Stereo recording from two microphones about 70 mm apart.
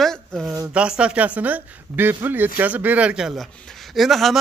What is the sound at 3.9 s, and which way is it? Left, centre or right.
Speech, centre.